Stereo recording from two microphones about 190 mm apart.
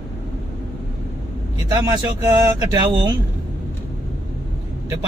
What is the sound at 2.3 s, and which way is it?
Speech, 15° right (ahead or behind).